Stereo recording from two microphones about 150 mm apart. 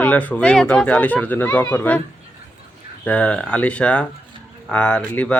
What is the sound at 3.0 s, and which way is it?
Speech, 10° left (ahead or behind).